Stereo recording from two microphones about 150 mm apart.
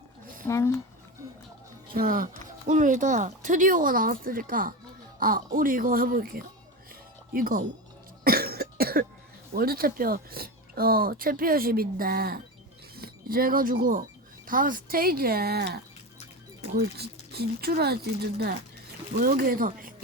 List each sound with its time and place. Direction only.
0.4 s speech: 20° left (ahead or behind)
1.9 s speech: 75° right (ahead or behind)
8.2 s cough: 90° right
9.6 s speech: 80° right
17.0 s speech: 90° right; by 19.9 s 70° right (ahead or behind)